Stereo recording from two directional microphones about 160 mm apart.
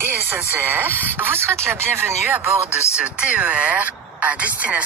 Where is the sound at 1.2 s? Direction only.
15° right (ahead or behind).